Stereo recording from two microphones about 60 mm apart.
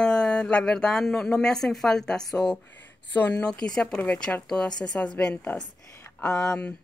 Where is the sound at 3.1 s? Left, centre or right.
Left.